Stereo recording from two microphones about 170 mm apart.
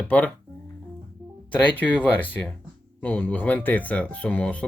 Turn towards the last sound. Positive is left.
turn(degrees=10)  # may be behind; listen again after turning